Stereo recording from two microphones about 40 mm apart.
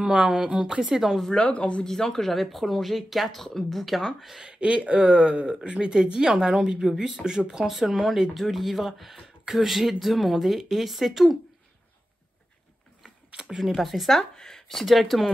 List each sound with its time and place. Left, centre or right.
0.0 s speech: right
1.3 s speech: left
1.9 s speech: centre
2.2 s speech: centre
4.5 s speech: right; by 8.3 s centre
8.4 s speech: centre
13.3 s a sound: right
13.6 s speech: centre
13.8 s speech: centre